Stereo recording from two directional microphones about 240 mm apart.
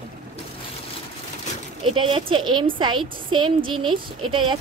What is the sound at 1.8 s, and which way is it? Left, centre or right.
A woman's voice, right.